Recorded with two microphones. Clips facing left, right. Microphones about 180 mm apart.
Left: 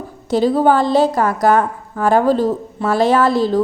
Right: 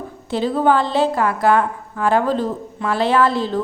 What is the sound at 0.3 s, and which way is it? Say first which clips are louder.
A woman's voice: left 4 dB; 40° left (ahead or behind).